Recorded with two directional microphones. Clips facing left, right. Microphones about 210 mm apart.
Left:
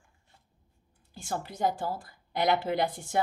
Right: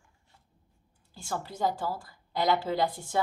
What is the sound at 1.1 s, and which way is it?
A woman's voice, 20° left (ahead or behind).